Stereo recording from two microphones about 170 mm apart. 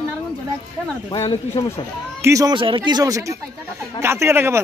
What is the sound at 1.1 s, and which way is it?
Speech, 35° left (ahead or behind).